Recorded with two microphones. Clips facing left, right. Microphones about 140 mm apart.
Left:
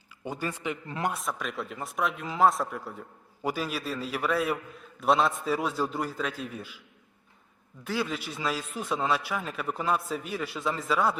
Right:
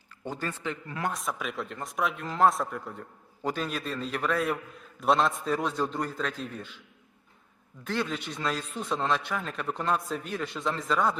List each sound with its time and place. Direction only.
0.3 s a man's voice: 10° left (ahead or behind)
1.1 s speech: centre (ahead or behind)
7.9 s speech: 5° left (ahead or behind)